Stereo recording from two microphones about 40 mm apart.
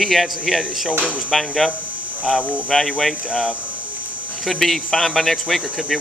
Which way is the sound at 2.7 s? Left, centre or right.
Centre.